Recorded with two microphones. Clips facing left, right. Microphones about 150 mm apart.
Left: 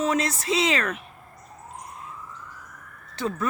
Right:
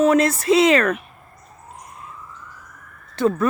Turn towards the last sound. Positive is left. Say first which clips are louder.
# right 9 dB
turn(degrees=-55)  # may be behind; listen again after turning